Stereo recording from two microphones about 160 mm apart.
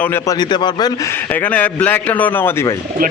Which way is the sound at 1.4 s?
10° left (ahead or behind).